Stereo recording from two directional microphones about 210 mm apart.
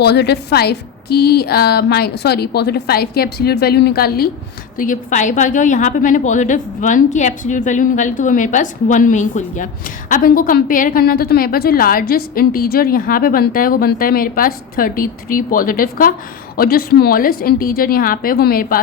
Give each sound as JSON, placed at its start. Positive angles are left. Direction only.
{"t": 0.0, "sound": "a woman's voice", "side_deg": 50}